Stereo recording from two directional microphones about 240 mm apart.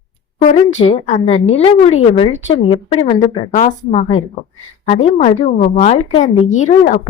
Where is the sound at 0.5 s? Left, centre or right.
Left.